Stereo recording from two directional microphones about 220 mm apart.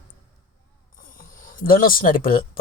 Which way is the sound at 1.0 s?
35° left (ahead or behind).